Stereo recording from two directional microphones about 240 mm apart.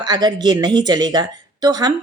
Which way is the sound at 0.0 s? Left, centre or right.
Centre.